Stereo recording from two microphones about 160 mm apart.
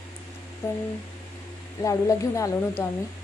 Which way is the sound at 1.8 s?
20° left (ahead or behind).